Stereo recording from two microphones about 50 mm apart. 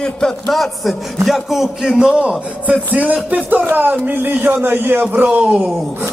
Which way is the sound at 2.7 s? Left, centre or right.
Right.